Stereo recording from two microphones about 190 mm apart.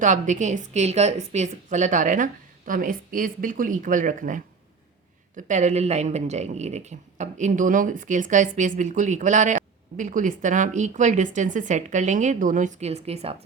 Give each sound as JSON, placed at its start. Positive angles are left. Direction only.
{"t": 0.0, "sound": "a woman's voice", "side_deg": -40}